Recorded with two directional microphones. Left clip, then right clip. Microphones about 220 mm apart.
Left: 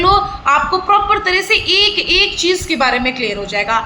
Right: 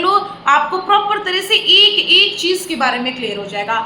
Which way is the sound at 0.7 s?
Centre (ahead or behind).